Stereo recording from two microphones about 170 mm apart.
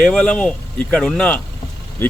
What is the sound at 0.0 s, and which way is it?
Speech, 5° left (ahead or behind).